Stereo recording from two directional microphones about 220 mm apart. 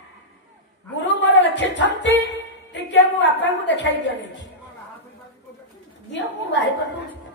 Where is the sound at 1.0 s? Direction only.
55° left (ahead or behind).